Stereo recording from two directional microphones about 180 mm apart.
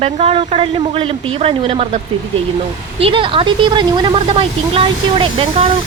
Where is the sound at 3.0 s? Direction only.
30° right (ahead or behind).